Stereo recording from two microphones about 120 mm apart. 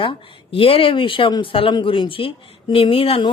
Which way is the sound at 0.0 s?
50° left (ahead or behind).